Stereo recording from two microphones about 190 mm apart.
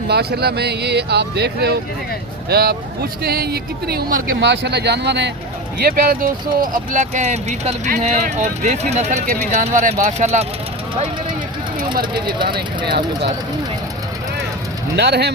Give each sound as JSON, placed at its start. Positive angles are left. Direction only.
{"t": 0.1, "sound": "speech", "side_deg": -55}
{"t": 5.8, "sound": "speech", "side_deg": -50}
{"t": 12.2, "sound": "speech", "side_deg": -25}
{"t": 14.9, "sound": "speech", "side_deg": -60}